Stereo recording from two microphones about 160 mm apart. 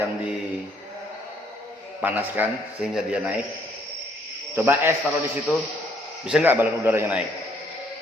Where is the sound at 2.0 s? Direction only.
10° right (ahead or behind).